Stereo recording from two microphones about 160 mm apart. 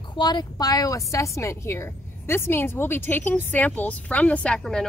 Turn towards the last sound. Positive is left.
turn(degrees=5)  # may be behind; listen again after turning